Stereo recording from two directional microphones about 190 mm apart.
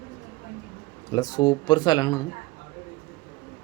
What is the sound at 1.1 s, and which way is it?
Speech, 20° left (ahead or behind).